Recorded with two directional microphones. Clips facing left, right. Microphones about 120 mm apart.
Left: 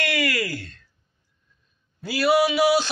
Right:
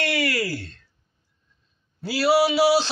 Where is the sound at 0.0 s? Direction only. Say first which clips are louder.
Right 1 dB; 30° right (ahead or behind).